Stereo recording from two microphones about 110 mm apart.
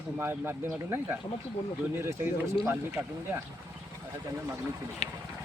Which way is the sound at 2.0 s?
25° right (ahead or behind).